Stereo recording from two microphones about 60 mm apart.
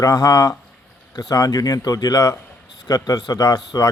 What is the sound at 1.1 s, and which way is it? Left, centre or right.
A man's voice, left.